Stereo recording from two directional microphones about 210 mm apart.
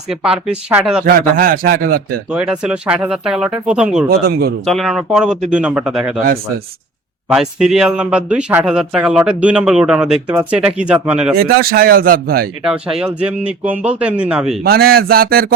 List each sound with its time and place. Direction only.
0.1 s speech: 5° right (ahead or behind)
1.0 s speech: 40° right (ahead or behind)
2.3 s speech: 5° right (ahead or behind)
4.1 s speech: 50° right (ahead or behind)
4.6 s speech: centre (ahead or behind)
7.3 s speech: 5° right (ahead or behind)
11.3 s speech: 45° right (ahead or behind)
12.6 s speech: 5° right (ahead or behind)
14.6 s speech: 45° right (ahead or behind)